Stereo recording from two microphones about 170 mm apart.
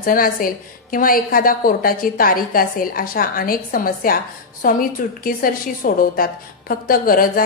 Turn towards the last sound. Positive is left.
turn(degrees=55)  # may be behind; listen again after turning